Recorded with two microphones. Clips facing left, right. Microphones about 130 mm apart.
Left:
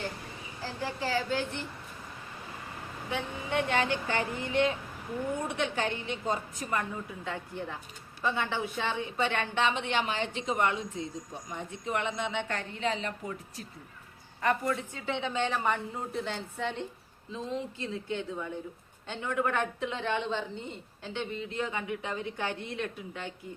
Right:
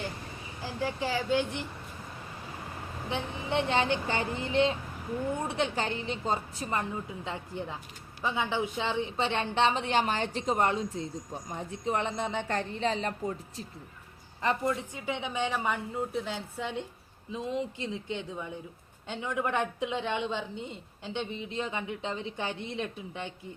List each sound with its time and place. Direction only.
0.6 s speech: 15° right (ahead or behind)
3.1 s a woman's voice: 25° right (ahead or behind)
7.3 s a woman's voice: 20° right (ahead or behind); by 13.3 s 35° right (ahead or behind)
14.4 s a woman's voice: 25° right (ahead or behind)